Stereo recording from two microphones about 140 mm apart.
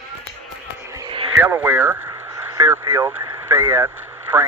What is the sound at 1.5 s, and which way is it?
Speech, 15° right (ahead or behind).